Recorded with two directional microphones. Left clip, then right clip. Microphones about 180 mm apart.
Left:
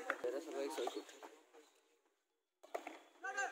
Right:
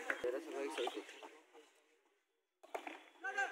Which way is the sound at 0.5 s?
90° left.